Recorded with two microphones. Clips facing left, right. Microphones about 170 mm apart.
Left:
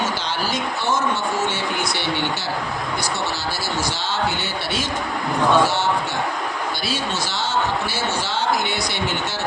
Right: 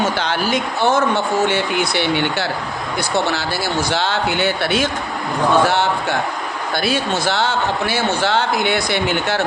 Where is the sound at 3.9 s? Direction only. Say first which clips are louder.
Right 5 dB; 60° right (ahead or behind).